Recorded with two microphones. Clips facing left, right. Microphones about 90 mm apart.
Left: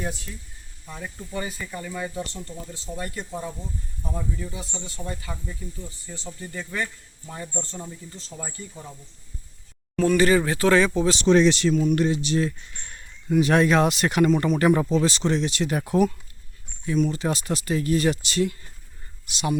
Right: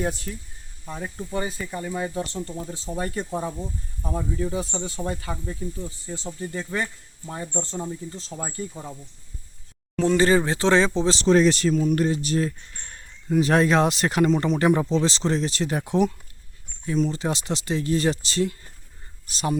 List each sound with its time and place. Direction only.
0.0 s speech: 45° right (ahead or behind)
0.9 s speech: 20° right (ahead or behind); by 5.0 s 40° right (ahead or behind)
5.6 s speech: 30° right (ahead or behind)
10.0 s speech: 25° right (ahead or behind)
15.8 s speech: 20° right (ahead or behind)
16.8 s speech: 30° right (ahead or behind)